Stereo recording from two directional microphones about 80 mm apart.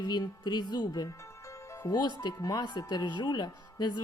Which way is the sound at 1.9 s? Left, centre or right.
Left.